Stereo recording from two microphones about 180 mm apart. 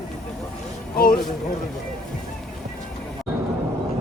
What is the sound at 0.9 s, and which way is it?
Speech, 55° left (ahead or behind).